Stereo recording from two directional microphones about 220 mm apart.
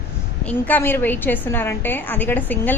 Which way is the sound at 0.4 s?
10° left (ahead or behind).